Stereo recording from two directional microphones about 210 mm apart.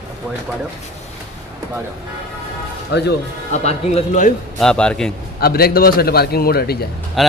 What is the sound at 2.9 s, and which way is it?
Speech, 50° left (ahead or behind).